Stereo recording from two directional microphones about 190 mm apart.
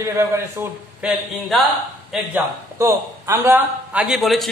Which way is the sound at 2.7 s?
15° right (ahead or behind).